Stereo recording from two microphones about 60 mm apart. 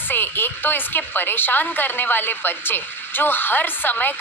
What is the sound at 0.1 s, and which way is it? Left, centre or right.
A woman's voice, left.